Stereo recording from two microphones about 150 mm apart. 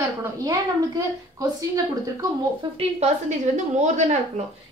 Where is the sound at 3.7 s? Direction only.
50° right (ahead or behind).